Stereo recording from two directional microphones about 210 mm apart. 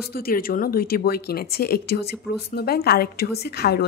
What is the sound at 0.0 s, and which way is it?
A woman's voice, 45° left (ahead or behind).